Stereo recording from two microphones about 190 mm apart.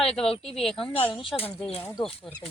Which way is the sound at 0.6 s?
Centre (ahead or behind).